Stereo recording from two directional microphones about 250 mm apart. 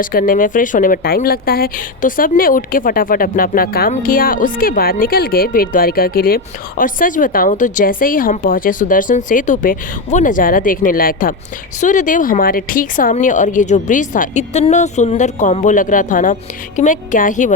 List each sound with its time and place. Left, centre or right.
0.0 s speech: left